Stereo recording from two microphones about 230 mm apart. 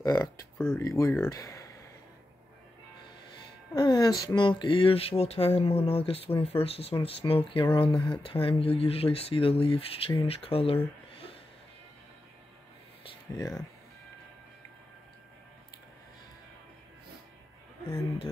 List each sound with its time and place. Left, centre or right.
0.0 s speech: centre
3.7 s speech: centre
13.4 s speech: centre